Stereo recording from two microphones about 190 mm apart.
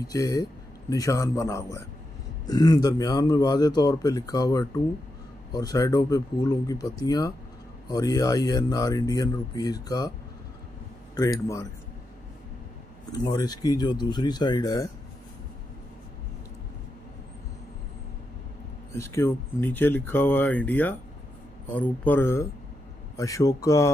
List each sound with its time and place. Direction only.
0.0 s a man's voice: 20° left (ahead or behind)
11.1 s speech: 20° left (ahead or behind)
13.2 s a man's voice: 20° left (ahead or behind)
18.9 s speech: 15° left (ahead or behind)